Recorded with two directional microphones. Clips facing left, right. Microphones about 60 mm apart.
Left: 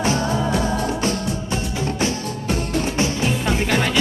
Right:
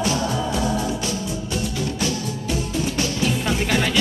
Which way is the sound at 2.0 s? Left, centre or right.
Left.